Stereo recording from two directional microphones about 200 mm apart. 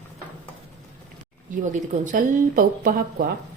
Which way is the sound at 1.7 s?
40° right (ahead or behind).